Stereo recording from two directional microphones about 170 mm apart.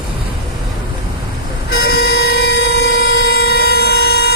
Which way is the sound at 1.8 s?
65° left (ahead or behind).